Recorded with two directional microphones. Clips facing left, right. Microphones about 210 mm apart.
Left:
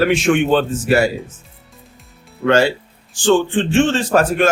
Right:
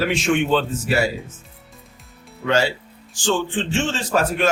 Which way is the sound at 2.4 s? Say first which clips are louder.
Left 6 dB; 55° left (ahead or behind).